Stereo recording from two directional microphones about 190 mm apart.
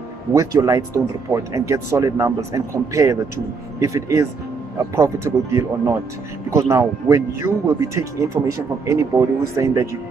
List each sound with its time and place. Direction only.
0.3 s speech: 15° right (ahead or behind)